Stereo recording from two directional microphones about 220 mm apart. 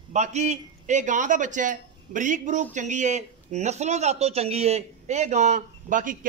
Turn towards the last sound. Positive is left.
turn(degrees=-35)  # may be behind; listen again after turning